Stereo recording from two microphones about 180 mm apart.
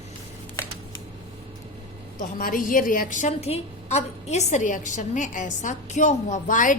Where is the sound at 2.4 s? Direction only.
50° left (ahead or behind).